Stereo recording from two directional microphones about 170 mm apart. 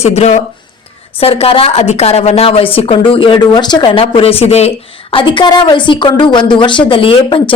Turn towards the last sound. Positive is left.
turn(degrees=30)  # may be behind; listen again after turning